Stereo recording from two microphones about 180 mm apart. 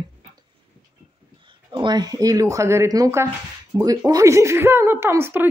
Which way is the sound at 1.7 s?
25° right (ahead or behind).